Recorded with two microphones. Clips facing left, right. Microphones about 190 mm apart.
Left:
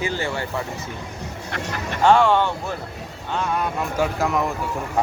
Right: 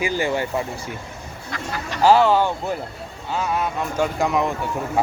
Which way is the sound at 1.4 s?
65° left (ahead or behind).